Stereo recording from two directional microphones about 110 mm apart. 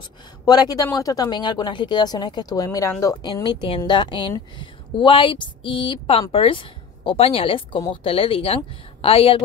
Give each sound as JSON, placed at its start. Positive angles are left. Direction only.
{"t": 0.5, "sound": "speech", "side_deg": 35}
{"t": 3.6, "sound": "a woman's voice", "side_deg": 50}